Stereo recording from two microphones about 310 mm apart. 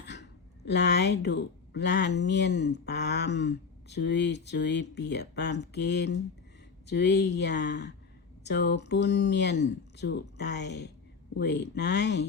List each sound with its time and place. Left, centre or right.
0.0 s speech: left